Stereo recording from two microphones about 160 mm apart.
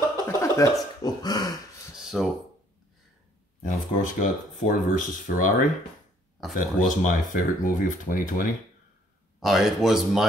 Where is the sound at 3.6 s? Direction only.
55° left (ahead or behind).